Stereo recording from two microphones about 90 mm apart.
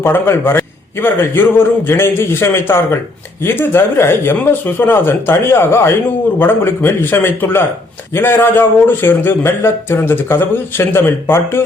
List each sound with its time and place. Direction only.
0.0 s speech: 25° left (ahead or behind)